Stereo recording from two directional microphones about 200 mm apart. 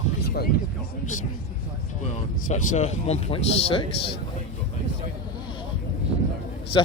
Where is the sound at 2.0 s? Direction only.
35° left (ahead or behind).